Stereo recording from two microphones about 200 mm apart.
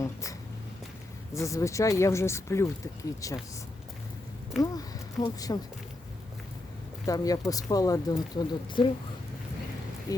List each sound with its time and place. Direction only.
0.0 s a sound: 15° left (ahead or behind)
1.3 s speech: 15° left (ahead or behind)
4.6 s speech: 20° left (ahead or behind)
7.0 s speech: 15° left (ahead or behind)
10.1 s speech: 15° left (ahead or behind)